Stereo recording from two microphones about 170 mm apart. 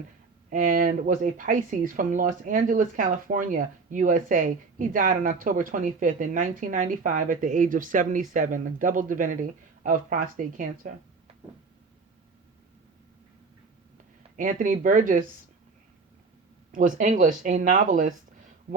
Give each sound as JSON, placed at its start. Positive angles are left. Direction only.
{"t": 0.5, "sound": "speech", "side_deg": -50}
{"t": 14.3, "sound": "speech", "side_deg": -50}
{"t": 16.7, "sound": "speech", "side_deg": -50}